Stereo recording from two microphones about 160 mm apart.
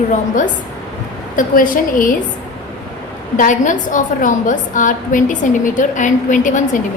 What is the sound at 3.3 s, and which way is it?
A woman's voice, 55° left (ahead or behind).